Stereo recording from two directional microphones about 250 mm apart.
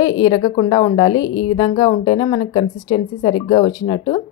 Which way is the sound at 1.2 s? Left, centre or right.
Left.